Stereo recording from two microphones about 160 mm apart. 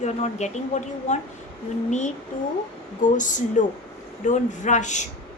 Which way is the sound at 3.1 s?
50° left (ahead or behind).